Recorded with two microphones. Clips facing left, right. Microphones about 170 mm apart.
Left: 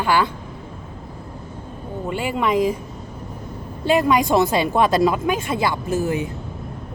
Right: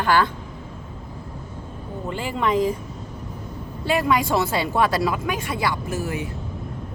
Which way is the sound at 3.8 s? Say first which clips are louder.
Left 4 dB; 20° left (ahead or behind).